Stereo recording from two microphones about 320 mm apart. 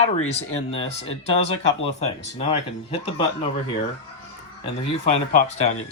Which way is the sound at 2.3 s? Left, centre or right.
Centre.